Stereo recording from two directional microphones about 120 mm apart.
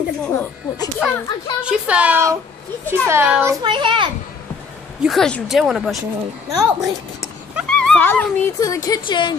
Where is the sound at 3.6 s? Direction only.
40° right (ahead or behind).